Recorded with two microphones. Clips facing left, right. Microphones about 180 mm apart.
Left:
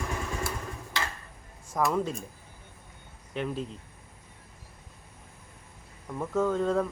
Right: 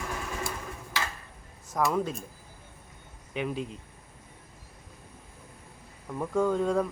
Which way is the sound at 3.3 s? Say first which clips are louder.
Even; 5° right (ahead or behind).